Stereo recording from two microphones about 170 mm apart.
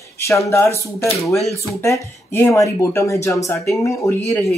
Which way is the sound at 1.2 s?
Centre (ahead or behind).